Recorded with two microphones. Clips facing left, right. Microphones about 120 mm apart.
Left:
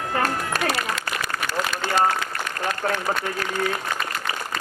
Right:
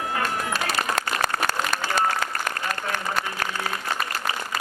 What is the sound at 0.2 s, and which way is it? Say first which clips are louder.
Run: left 5 dB; 50° left (ahead or behind).